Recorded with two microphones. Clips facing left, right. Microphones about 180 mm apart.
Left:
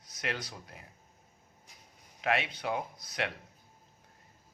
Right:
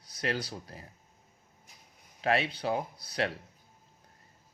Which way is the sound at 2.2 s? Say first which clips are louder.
Right 3 dB; 35° right (ahead or behind).